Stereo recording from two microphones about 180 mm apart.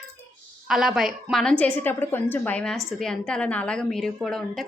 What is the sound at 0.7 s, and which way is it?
A woman's voice, centre (ahead or behind).